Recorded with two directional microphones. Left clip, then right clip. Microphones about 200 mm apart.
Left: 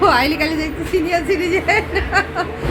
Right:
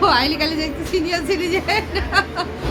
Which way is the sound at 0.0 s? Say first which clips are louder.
Left 2 dB; 15° left (ahead or behind).